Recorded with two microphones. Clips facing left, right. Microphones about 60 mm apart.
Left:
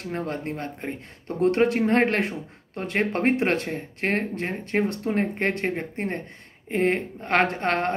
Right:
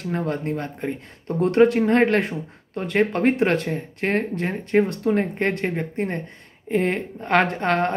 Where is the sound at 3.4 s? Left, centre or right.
Centre.